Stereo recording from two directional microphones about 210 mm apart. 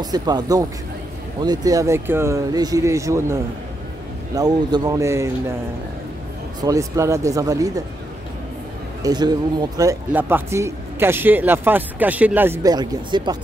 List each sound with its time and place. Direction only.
0.0 s speech: 20° right (ahead or behind)
4.4 s speech: 20° right (ahead or behind)
6.6 s speech: 15° right (ahead or behind)
9.0 s speech: 20° right (ahead or behind)